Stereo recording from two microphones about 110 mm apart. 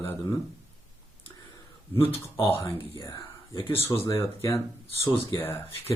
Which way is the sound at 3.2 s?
45° left (ahead or behind).